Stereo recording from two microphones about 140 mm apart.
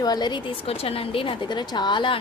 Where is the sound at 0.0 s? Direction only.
30° left (ahead or behind).